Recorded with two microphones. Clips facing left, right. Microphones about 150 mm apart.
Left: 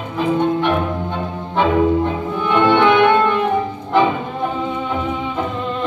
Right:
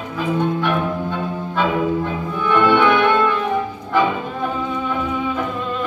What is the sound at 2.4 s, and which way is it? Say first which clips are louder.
Music: left 1 dB; 20° left (ahead or behind).